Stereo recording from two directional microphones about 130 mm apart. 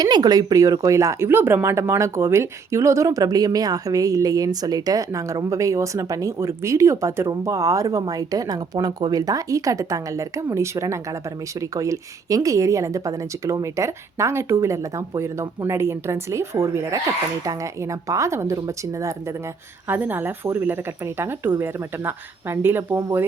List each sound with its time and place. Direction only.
0.0 s speech: 30° right (ahead or behind)
19.9 s speech: 15° right (ahead or behind)